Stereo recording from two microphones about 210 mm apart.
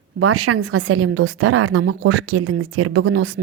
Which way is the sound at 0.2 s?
90° right.